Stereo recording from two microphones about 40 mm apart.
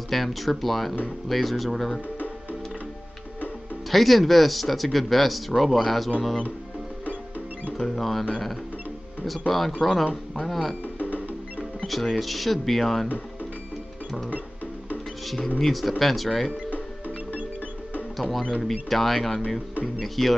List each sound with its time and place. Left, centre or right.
0.1 s speech: centre
3.9 s speech: centre
7.7 s speech: centre
9.8 s speech: centre
11.9 s speech: centre
15.2 s speech: centre
18.1 s speech: centre